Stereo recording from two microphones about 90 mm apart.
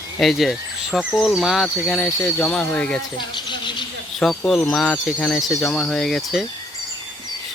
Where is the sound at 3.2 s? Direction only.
60° left (ahead or behind).